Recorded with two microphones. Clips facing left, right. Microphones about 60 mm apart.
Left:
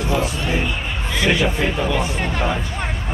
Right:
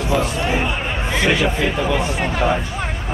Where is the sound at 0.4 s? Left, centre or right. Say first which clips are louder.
Right 2 dB; centre.